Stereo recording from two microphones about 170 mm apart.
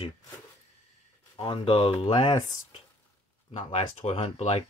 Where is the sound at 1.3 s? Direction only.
30° left (ahead or behind).